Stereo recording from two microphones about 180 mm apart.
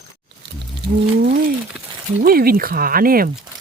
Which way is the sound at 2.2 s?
55° right (ahead or behind).